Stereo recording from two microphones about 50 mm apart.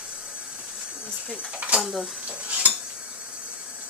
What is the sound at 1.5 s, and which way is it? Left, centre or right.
Speech, right.